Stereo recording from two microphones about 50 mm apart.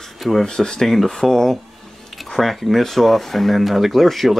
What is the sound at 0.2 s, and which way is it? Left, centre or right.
Speech, centre.